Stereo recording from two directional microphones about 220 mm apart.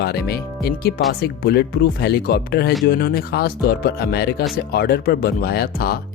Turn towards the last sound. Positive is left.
turn(degrees=45)  # may be behind; listen again after turning